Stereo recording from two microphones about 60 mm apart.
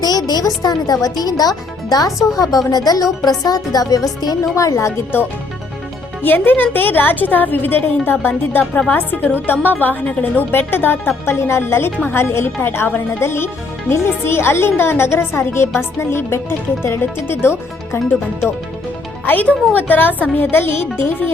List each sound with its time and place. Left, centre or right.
0.0 s speech: left
2.6 s speech: left
4.5 s a woman's voice: left
6.2 s a woman's voice: left
10.5 s a woman's voice: left
11.3 s a woman's voice: left
19.2 s a woman's voice: left